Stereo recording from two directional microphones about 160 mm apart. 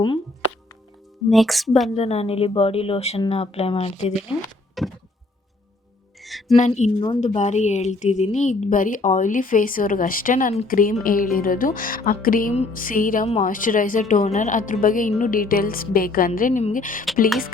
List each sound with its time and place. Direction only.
1.3 s speech: centre (ahead or behind)
2.0 s speech: 40° left (ahead or behind)
4.8 s music: centre (ahead or behind)
6.2 s music: centre (ahead or behind)
6.6 s a woman's voice: 45° left (ahead or behind)